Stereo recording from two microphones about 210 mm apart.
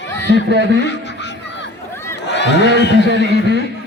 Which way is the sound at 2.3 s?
55° left (ahead or behind).